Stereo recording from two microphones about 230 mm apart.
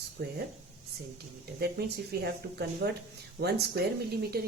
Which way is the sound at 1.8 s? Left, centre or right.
Right.